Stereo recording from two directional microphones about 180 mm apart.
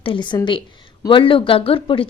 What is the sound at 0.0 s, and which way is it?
A woman's voice, 25° left (ahead or behind).